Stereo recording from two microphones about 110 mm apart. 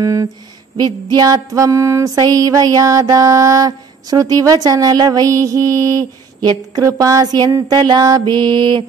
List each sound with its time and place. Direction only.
0.0 s music: 30° right (ahead or behind)
0.7 s music: 40° right (ahead or behind)